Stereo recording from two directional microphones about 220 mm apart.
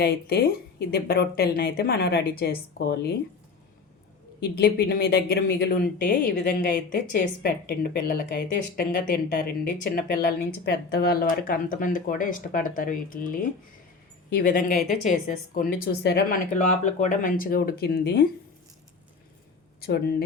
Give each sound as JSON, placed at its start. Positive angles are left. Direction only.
{"t": 0.0, "sound": "a woman's voice", "side_deg": 45}
{"t": 4.4, "sound": "a woman's voice", "side_deg": 45}
{"t": 19.8, "sound": "a woman's voice", "side_deg": 45}